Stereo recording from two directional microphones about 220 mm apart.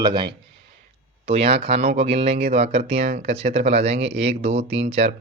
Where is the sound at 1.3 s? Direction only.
25° right (ahead or behind).